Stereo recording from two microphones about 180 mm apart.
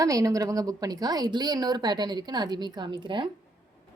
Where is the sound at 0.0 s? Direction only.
20° right (ahead or behind).